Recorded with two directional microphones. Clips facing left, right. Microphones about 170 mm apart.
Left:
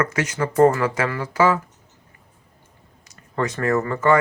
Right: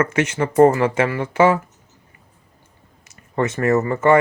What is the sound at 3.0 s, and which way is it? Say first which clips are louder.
Speech: right 3 dB; 25° right (ahead or behind).